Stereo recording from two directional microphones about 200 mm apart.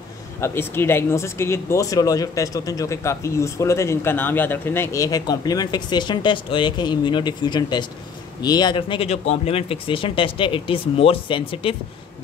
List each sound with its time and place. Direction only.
0.4 s speech: 10° left (ahead or behind)